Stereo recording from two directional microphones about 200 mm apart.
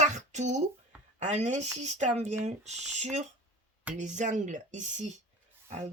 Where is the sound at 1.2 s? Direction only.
35° right (ahead or behind).